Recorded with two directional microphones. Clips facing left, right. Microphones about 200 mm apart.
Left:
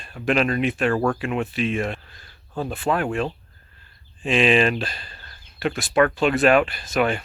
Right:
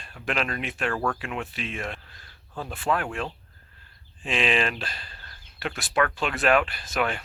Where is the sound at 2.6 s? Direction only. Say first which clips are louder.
Left 6 dB; 30° left (ahead or behind).